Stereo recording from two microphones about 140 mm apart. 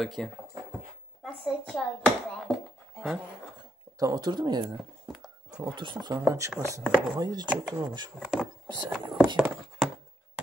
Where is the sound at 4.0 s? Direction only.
30° right (ahead or behind).